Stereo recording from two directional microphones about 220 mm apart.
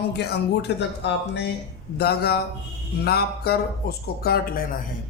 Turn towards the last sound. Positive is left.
turn(degrees=40)  # may be behind; listen again after turning